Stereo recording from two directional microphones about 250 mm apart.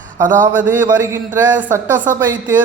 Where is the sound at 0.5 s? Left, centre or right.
Centre.